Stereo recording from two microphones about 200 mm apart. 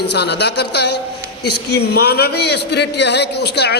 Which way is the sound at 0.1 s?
55° left (ahead or behind).